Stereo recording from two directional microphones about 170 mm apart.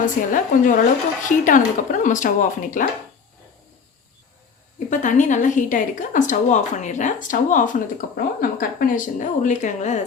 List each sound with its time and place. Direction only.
0.0 s a woman's voice: 50° left (ahead or behind)
4.9 s a woman's voice: 45° left (ahead or behind)